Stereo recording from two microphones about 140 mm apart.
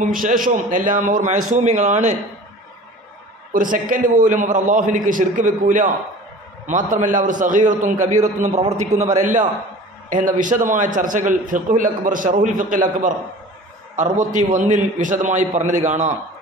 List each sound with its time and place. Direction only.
0.0 s a man's voice: 80° right; by 2.1 s 60° right (ahead or behind)
3.5 s a man's voice: 70° right (ahead or behind)
14.1 s a man's voice: 65° right (ahead or behind)